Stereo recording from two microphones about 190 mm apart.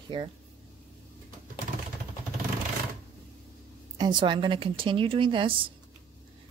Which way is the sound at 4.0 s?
25° right (ahead or behind).